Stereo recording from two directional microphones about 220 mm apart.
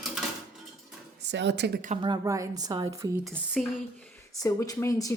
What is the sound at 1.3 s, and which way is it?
Speech, 50° right (ahead or behind).